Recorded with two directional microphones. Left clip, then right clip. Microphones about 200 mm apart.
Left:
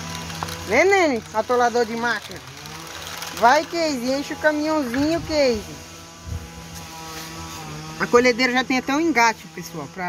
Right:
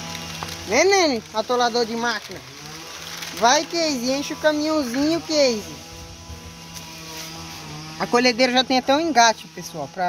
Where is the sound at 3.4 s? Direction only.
10° right (ahead or behind).